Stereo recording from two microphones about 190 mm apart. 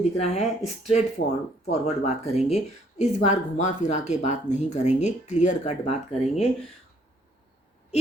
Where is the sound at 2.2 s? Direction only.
35° left (ahead or behind).